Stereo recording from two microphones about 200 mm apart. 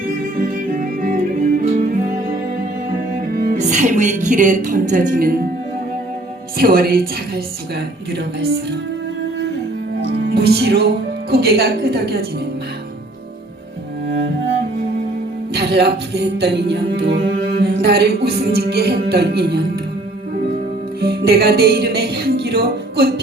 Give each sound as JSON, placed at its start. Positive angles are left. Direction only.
{"t": 0.1, "sound": "music", "side_deg": -45}
{"t": 6.6, "sound": "a woman's voice", "side_deg": -50}
{"t": 10.2, "sound": "speech", "side_deg": -55}
{"t": 15.5, "sound": "music", "side_deg": -55}
{"t": 21.0, "sound": "music", "side_deg": -50}